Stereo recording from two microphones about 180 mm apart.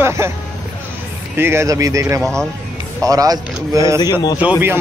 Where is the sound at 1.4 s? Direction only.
15° right (ahead or behind).